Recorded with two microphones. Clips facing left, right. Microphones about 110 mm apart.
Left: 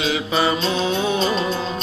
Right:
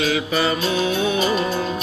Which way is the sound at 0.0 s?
20° left (ahead or behind).